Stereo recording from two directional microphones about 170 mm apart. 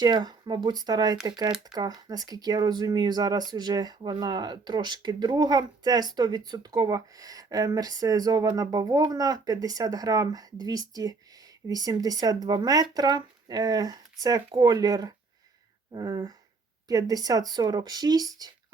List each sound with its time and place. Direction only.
0.0 s speech: 25° right (ahead or behind)